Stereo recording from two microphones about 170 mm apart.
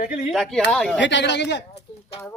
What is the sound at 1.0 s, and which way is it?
Speech, 90° left.